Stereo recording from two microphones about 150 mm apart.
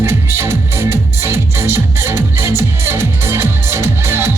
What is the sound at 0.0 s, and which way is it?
Music, 15° right (ahead or behind).